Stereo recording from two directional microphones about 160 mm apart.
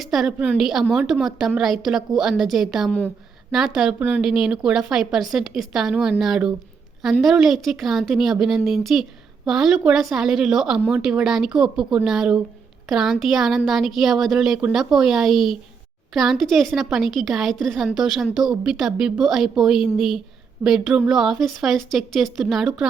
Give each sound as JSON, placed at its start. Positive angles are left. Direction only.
{"t": 0.0, "sound": "a woman's voice", "side_deg": 0}